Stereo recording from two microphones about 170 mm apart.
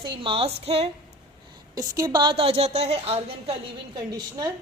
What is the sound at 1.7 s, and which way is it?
A woman's voice, 20° right (ahead or behind).